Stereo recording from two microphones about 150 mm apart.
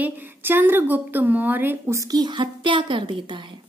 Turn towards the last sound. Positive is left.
turn(degrees=-35)  # may be behind; listen again after turning